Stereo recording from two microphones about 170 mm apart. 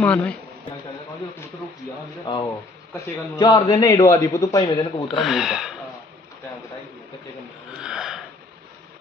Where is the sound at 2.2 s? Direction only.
20° left (ahead or behind).